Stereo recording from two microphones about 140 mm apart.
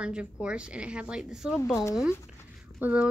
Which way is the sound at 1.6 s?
20° left (ahead or behind).